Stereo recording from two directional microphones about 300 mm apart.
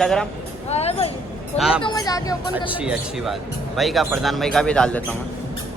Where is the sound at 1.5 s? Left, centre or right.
Centre.